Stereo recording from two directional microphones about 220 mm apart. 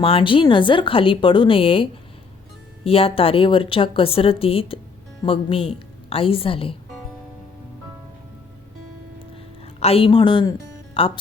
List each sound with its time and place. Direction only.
0.0 s a woman's voice: 25° left (ahead or behind)
9.8 s a woman's voice: 25° left (ahead or behind)